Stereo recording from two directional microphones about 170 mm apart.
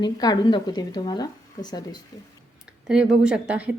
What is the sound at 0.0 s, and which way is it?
A woman's voice, 25° left (ahead or behind).